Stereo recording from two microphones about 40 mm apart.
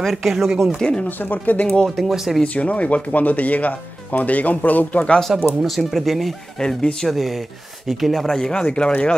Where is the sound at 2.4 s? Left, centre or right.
Left.